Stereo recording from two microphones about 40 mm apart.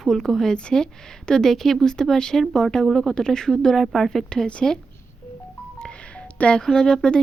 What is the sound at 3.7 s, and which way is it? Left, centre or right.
Speech, centre.